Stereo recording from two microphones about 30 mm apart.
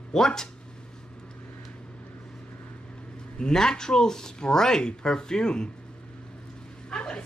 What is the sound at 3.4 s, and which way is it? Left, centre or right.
Speech, left.